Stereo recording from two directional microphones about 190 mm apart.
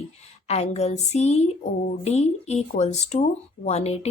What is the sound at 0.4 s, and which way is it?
A woman's voice, 35° left (ahead or behind).